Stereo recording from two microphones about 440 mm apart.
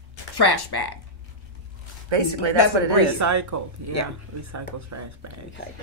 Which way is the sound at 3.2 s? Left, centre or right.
Right.